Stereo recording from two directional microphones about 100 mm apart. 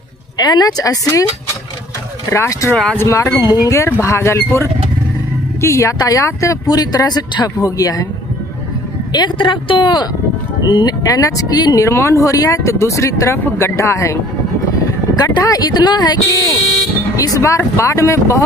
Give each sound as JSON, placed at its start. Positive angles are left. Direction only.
{"t": 0.4, "sound": "speech", "side_deg": 40}
{"t": 2.3, "sound": "speech", "side_deg": 25}
{"t": 2.7, "sound": "speech", "side_deg": 10}
{"t": 3.0, "sound": "speech", "side_deg": 30}
{"t": 3.3, "sound": "speech", "side_deg": 40}
{"t": 9.1, "sound": "a woman's voice", "side_deg": 50}